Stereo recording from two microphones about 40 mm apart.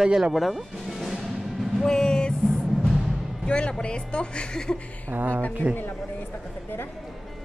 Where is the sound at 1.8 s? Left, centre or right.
Centre.